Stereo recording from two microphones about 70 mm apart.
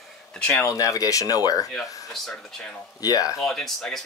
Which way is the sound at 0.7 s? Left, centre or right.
Left.